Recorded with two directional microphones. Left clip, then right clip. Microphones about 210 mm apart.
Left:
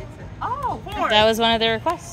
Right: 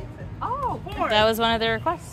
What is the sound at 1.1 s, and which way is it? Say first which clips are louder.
Speech: left 3 dB; 25° left (ahead or behind).